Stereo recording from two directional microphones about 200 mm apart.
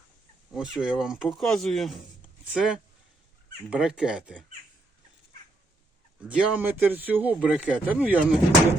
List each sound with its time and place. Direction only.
0.5 s speech: 5° right (ahead or behind)
6.2 s speech: 5° right (ahead or behind)